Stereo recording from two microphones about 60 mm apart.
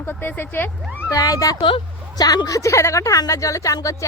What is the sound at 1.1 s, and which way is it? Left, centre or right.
A woman's voice, left.